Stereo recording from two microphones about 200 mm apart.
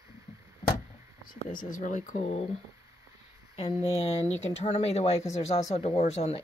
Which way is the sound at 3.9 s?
30° left (ahead or behind).